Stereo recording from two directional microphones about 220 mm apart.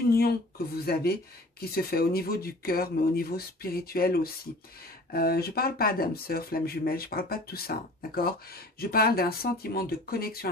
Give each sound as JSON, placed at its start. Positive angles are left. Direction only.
{"t": 0.8, "sound": "speech", "side_deg": 45}